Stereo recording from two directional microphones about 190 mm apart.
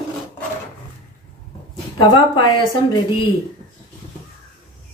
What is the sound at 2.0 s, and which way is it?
Speech, 25° left (ahead or behind).